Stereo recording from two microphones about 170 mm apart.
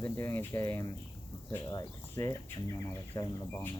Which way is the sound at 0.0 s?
15° left (ahead or behind).